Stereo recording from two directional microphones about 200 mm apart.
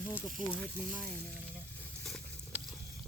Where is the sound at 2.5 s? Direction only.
10° right (ahead or behind).